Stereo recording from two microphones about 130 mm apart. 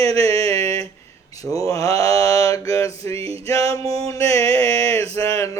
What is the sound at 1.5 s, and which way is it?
Mantra, 25° left (ahead or behind).